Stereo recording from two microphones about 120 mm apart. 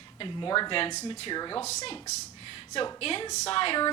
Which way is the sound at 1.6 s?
65° left (ahead or behind).